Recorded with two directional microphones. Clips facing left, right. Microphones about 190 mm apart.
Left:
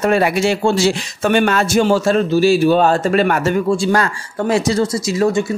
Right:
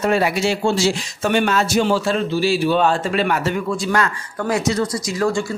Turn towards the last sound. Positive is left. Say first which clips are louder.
# left 4 dB
turn(degrees=25)  # may be behind; listen again after turning